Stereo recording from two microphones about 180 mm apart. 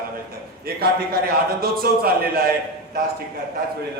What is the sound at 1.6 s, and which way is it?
Speech, 55° right (ahead or behind).